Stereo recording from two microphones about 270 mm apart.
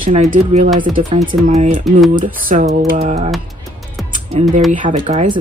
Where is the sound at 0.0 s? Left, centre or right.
Right.